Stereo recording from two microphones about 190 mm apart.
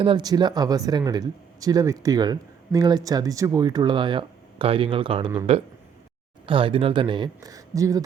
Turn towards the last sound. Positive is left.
turn(degrees=-20)  # may be behind; listen again after turning